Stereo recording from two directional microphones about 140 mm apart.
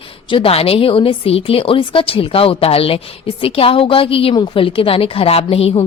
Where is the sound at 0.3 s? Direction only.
40° left (ahead or behind).